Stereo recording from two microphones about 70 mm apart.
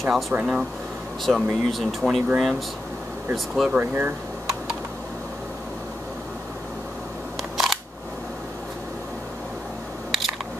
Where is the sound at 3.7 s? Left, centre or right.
Right.